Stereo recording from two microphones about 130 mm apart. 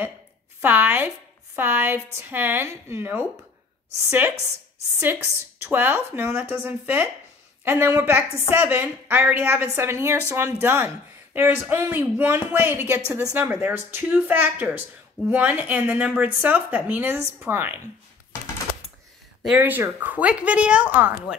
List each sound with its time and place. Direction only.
0.6 s speech: 15° right (ahead or behind)
5.0 s speech: 15° right (ahead or behind)
19.4 s speech: 10° right (ahead or behind)